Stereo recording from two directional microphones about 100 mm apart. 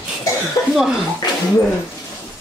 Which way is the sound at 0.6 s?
25° left (ahead or behind).